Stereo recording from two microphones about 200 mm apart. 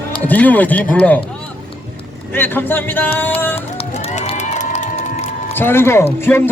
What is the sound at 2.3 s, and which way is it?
Speech, 10° left (ahead or behind).